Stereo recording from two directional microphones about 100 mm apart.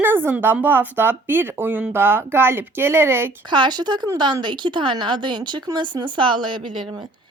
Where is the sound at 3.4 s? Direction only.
50° right (ahead or behind).